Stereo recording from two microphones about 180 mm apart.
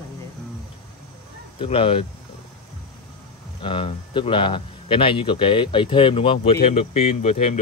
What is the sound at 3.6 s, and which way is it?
A man's voice, 30° left (ahead or behind).